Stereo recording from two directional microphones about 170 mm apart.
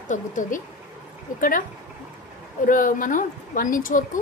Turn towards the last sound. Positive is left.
turn(degrees=55)  # may be behind; listen again after turning